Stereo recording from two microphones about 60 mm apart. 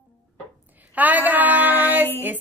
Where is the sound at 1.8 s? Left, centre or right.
Right.